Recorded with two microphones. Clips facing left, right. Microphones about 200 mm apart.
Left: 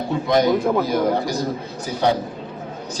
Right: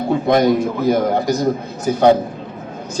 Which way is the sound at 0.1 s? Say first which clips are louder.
Right 4 dB; 55° right (ahead or behind).